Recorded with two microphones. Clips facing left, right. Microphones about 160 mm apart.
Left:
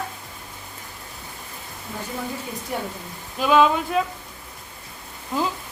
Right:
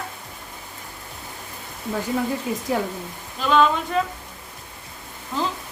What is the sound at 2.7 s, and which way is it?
Speech, 90° right.